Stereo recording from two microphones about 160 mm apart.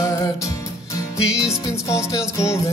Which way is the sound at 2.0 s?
20° left (ahead or behind).